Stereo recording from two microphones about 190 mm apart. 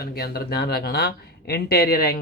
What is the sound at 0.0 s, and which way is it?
Speech, 55° left (ahead or behind).